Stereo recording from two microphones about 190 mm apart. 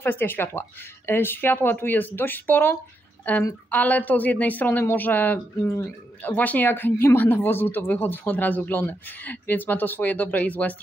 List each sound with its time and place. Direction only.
0.0 s speech: 10° left (ahead or behind)